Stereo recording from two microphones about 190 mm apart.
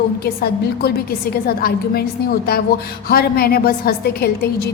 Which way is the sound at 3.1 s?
55° left (ahead or behind).